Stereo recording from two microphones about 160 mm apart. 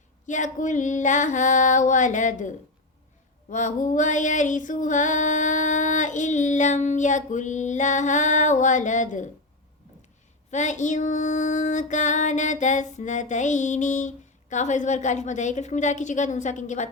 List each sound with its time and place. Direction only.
0.3 s female singing: 50° left (ahead or behind)
10.5 s female singing: 50° left (ahead or behind)